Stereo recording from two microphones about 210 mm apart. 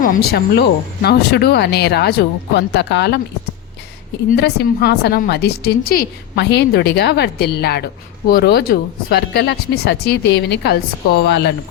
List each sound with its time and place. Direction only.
0.0 s a woman's voice: 45° left (ahead or behind)
4.3 s a woman's voice: 50° left (ahead or behind)